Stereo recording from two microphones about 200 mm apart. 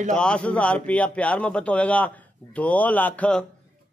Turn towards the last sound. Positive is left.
turn(degrees=5)  # may be behind; listen again after turning